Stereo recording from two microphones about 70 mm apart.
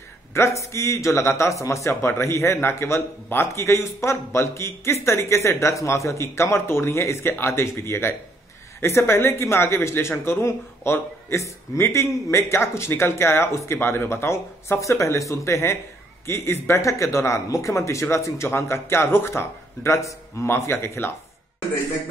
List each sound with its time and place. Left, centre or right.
0.3 s a man's voice: left